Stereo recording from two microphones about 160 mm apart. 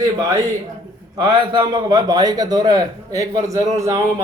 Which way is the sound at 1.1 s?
30° right (ahead or behind).